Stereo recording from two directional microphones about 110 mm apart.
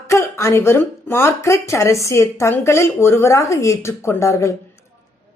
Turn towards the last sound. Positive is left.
turn(degrees=25)  # may be behind; listen again after turning